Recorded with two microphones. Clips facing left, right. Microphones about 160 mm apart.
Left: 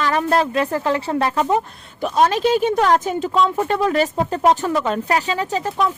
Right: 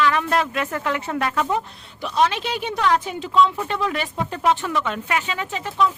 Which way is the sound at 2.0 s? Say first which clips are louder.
Left 5 dB; 45° left (ahead or behind).